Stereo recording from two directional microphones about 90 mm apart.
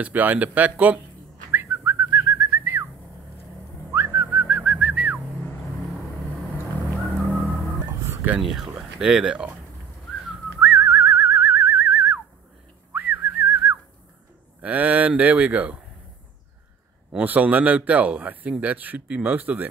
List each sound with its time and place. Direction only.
0.0 s a man's voice: 20° right (ahead or behind)
1.5 s whistling: 25° right (ahead or behind)
3.9 s whistling: 30° right (ahead or behind)
4.5 s whistling: 10° right (ahead or behind)
8.1 s a sound: 25° right (ahead or behind)
8.4 s a man's voice: 5° right (ahead or behind)
10.6 s whistling: 20° right (ahead or behind)
14.6 s a man's voice: 15° right (ahead or behind)
17.2 s a man's voice: 20° right (ahead or behind)